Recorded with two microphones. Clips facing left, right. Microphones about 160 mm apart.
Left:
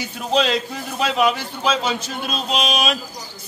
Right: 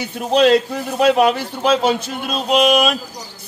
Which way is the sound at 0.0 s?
55° right (ahead or behind).